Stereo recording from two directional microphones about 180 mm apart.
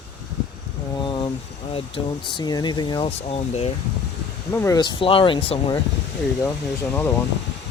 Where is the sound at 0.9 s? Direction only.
25° left (ahead or behind).